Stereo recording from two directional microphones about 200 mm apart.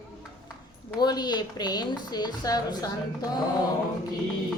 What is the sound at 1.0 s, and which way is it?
A woman's voice, 20° left (ahead or behind).